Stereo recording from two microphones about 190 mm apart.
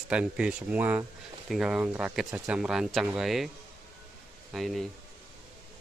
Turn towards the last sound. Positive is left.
turn(degrees=0)  # may be behind; listen again after turning